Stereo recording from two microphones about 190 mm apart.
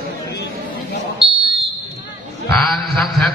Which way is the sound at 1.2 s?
30° right (ahead or behind).